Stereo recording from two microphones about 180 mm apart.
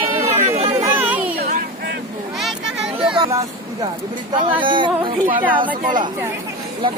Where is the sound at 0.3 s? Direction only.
35° right (ahead or behind).